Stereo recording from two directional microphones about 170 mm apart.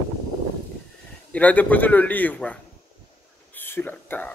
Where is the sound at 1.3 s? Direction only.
10° left (ahead or behind).